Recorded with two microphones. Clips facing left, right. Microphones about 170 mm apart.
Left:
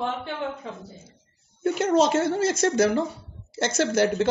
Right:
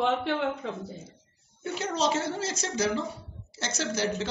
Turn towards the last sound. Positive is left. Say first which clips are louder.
# left 8 dB
turn(degrees=55)  # may be behind; listen again after turning